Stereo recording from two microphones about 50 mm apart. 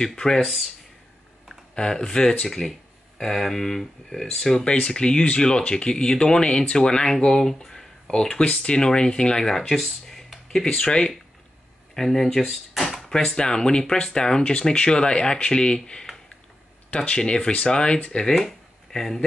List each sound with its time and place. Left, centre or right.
0.0 s speech: centre
0.4 s speech: centre
1.8 s speech: centre
4.7 s speech: left
9.8 s a sound: centre
10.7 s speech: centre
11.9 s speech: centre
13.1 s speech: centre
16.9 s speech: left
18.4 s a sound: centre